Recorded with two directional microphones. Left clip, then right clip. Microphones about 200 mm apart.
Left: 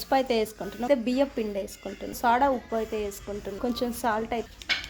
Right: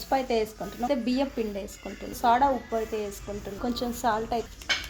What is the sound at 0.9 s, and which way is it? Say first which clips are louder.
Speech: left 4 dB; 25° left (ahead or behind).